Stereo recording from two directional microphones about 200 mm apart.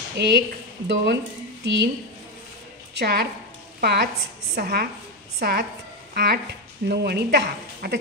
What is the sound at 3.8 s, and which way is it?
A woman's voice, 55° right (ahead or behind).